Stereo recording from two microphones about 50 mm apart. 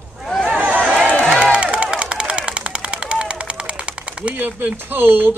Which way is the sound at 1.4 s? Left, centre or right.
Right.